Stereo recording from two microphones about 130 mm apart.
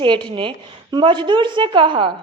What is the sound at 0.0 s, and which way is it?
A woman's voice, 40° right (ahead or behind).